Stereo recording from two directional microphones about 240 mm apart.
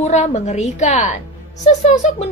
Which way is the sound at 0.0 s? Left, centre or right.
Left.